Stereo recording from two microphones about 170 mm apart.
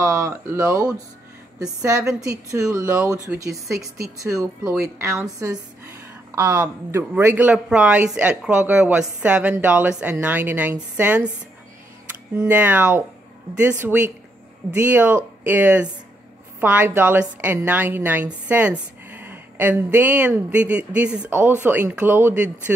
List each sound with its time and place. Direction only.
0.0 s a woman's voice: 15° right (ahead or behind)
2.0 s a woman's voice: 20° right (ahead or behind)
12.4 s a woman's voice: 10° right (ahead or behind)